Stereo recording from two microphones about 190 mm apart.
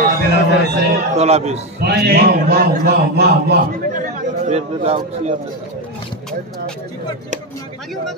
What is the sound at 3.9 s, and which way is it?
Chatter, 45° right (ahead or behind).